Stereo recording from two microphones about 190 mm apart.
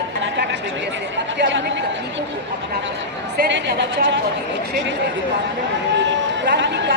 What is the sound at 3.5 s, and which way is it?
Speech, 60° right (ahead or behind).